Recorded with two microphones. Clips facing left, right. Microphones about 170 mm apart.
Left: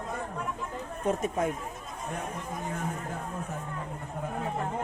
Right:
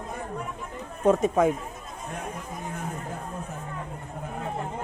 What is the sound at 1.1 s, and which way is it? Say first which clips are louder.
Speech: right 8 dB; 90° right.